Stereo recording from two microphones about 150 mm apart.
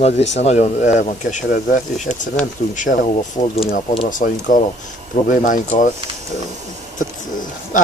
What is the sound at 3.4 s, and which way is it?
Speech, 40° left (ahead or behind).